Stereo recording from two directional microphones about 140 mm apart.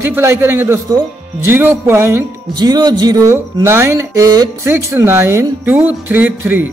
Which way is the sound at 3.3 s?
20° right (ahead or behind).